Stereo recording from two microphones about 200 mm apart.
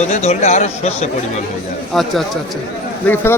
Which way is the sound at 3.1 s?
10° left (ahead or behind).